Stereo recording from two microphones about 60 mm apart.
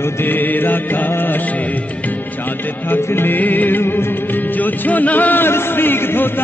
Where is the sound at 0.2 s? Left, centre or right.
Left.